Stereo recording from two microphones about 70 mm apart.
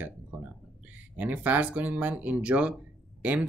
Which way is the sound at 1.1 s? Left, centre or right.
Right.